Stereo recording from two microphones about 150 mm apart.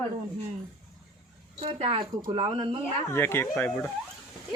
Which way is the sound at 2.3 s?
40° right (ahead or behind).